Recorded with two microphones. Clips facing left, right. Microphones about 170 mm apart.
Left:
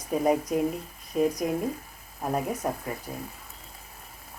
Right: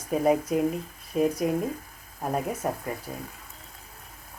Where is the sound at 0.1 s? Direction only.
5° right (ahead or behind).